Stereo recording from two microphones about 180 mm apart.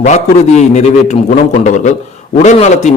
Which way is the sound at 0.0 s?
40° left (ahead or behind).